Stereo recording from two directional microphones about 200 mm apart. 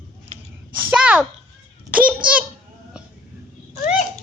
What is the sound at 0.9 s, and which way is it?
A child's voice, 5° right (ahead or behind).